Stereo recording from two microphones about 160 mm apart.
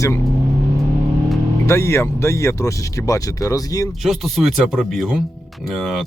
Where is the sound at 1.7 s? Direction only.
20° left (ahead or behind).